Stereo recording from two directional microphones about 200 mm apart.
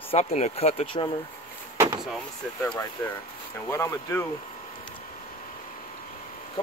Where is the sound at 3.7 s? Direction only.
15° left (ahead or behind).